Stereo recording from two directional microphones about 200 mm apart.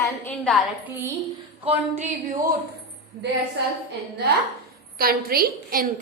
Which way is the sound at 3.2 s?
60° right (ahead or behind).